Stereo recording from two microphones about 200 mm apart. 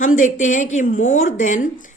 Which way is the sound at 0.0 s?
40° left (ahead or behind).